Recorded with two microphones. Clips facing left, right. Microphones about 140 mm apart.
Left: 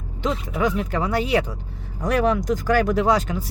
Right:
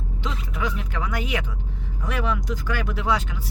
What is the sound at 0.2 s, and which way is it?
Speech, 45° left (ahead or behind).